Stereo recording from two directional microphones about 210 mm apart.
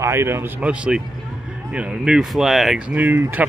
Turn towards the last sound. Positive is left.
turn(degrees=-10)  # may be behind; listen again after turning